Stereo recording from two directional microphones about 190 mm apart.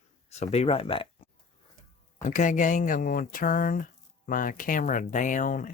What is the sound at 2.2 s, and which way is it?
Speech, 40° left (ahead or behind).